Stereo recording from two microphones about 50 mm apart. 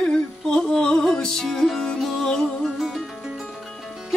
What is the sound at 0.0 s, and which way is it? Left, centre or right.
Music, centre.